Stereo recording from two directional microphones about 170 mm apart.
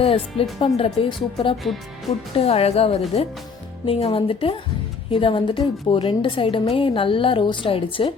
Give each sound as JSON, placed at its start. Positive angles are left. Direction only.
{"t": 0.0, "sound": "a woman's voice", "side_deg": 35}